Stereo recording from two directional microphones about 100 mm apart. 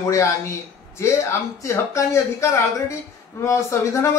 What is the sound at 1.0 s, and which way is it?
A man's voice, 30° left (ahead or behind).